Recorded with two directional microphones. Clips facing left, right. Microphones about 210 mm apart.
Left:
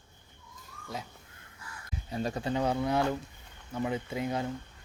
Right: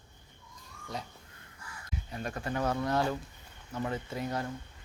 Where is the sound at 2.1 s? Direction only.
25° left (ahead or behind).